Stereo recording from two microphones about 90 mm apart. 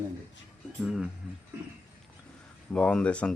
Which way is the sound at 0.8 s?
5° right (ahead or behind).